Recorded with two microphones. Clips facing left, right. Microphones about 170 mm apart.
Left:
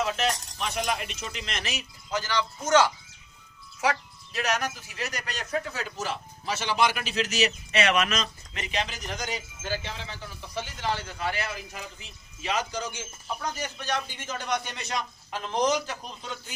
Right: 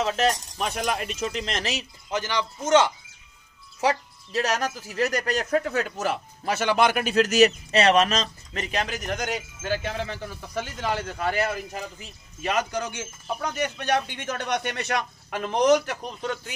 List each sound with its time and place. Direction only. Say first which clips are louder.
0.0 s speech: right 4 dB; 40° right (ahead or behind); by 2.9 s 25° right (ahead or behind)
3.8 s a man's voice: right 3 dB; 35° right (ahead or behind); by 16.5 s 65° right (ahead or behind)